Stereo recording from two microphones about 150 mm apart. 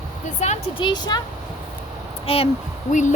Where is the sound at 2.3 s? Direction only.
40° left (ahead or behind).